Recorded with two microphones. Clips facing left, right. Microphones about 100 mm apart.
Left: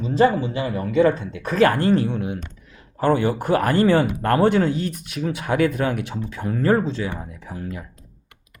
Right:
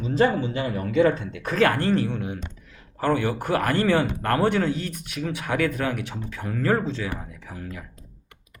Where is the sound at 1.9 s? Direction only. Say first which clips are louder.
Left 3 dB; 20° left (ahead or behind).